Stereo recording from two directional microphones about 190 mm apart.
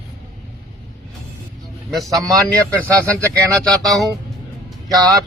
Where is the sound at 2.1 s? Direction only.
20° right (ahead or behind).